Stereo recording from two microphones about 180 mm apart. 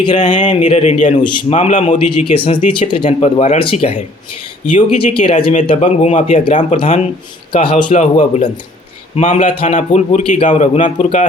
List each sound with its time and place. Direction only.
0.1 s speech: 40° left (ahead or behind)